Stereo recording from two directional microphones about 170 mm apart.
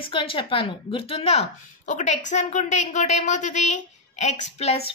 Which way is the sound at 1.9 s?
45° left (ahead or behind).